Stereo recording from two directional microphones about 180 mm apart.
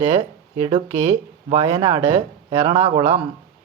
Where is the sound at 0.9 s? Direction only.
10° right (ahead or behind).